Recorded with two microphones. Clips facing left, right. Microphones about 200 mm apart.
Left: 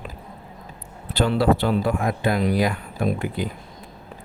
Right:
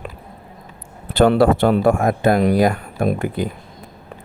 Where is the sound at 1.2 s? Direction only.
50° right (ahead or behind).